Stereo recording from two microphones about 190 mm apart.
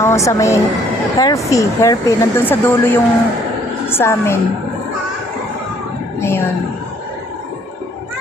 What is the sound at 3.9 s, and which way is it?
Speech, 15° left (ahead or behind).